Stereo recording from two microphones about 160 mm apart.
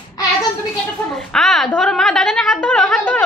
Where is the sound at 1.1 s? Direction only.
Centre (ahead or behind).